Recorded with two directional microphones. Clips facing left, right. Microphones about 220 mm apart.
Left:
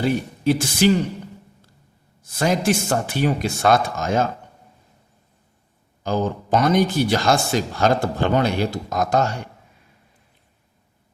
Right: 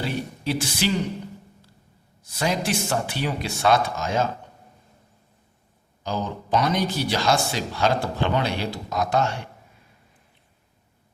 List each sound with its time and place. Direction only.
0.0 s speech: 50° left (ahead or behind)
2.3 s speech: 50° left (ahead or behind)
6.0 s speech: 50° left (ahead or behind)